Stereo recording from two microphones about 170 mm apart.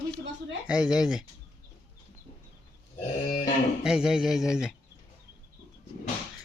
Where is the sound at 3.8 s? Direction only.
5° right (ahead or behind).